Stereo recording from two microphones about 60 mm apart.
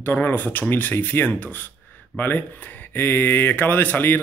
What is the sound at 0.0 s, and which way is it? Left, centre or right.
A man's voice, left.